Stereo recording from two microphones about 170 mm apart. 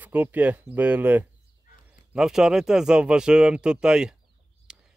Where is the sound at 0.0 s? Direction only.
10° right (ahead or behind).